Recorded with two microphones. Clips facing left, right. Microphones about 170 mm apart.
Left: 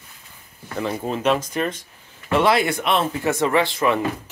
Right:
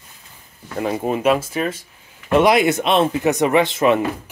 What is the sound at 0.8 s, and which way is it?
Speech, 15° right (ahead or behind).